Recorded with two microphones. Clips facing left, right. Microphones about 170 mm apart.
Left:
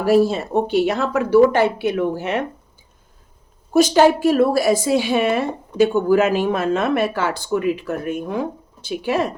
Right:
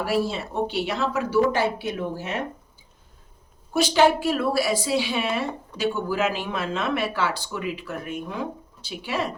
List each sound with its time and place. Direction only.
0.0 s a woman's voice: 45° left (ahead or behind); by 2.4 s 65° left (ahead or behind)
3.7 s a woman's voice: 45° left (ahead or behind)